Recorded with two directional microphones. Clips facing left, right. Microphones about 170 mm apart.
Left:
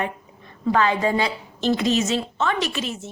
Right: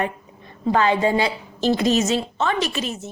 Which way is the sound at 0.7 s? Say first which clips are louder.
Right 2 dB; 30° right (ahead or behind).